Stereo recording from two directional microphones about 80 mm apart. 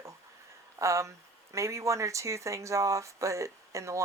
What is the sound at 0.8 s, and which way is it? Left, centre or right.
Speech, right.